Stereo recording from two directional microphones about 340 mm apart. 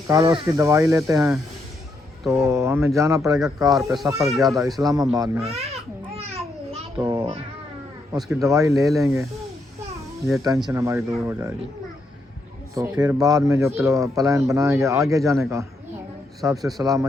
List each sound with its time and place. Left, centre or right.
0.1 s speech: centre
6.0 s babbling: centre
6.9 s a sound: centre
8.1 s speech: centre
10.2 s speech: centre
12.7 s speech: centre